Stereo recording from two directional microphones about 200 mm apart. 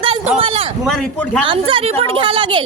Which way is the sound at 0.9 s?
5° left (ahead or behind).